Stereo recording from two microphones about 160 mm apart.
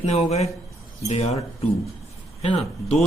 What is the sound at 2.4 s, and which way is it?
Speech, 40° left (ahead or behind).